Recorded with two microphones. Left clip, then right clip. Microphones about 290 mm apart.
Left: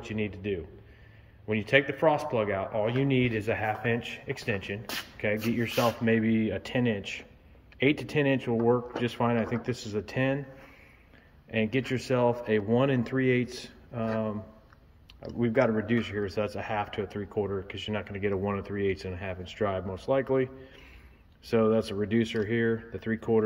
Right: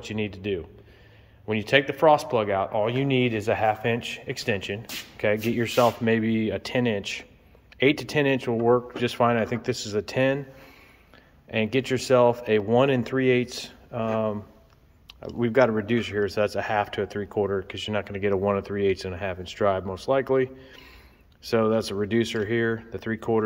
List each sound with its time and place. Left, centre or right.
0.0 s speech: centre
11.5 s speech: centre